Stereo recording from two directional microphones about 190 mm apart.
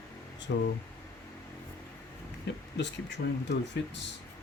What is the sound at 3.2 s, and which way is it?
Speech, 60° left (ahead or behind).